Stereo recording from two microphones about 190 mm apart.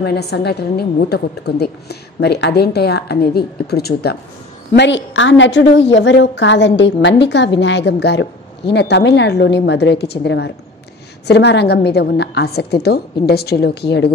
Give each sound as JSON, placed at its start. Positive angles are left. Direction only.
{"t": 0.0, "sound": "a woman's voice", "side_deg": 60}
{"t": 4.7, "sound": "a woman's voice", "side_deg": 70}